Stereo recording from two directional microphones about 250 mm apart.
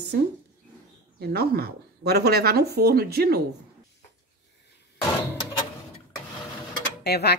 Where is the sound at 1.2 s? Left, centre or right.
Right.